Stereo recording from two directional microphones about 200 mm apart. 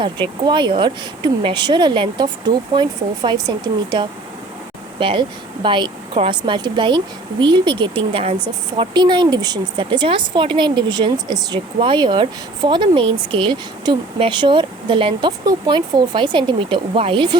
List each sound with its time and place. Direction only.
0.0 s speech: 25° right (ahead or behind)